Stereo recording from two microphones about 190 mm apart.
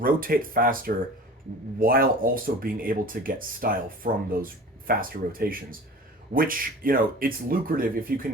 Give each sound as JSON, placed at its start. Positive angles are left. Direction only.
{"t": 0.0, "sound": "speech", "side_deg": -50}